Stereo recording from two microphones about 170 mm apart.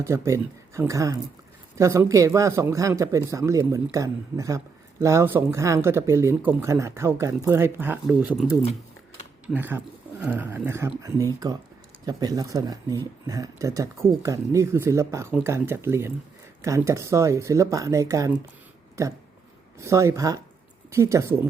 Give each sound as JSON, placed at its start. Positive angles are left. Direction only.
{"t": 0.0, "sound": "speech", "side_deg": -15}
{"t": 8.0, "sound": "speech", "side_deg": -5}